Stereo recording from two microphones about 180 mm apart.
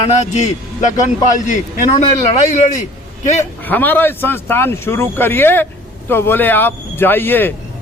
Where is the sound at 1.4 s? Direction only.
40° left (ahead or behind).